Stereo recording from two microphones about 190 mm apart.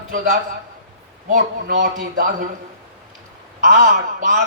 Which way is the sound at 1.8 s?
45° right (ahead or behind).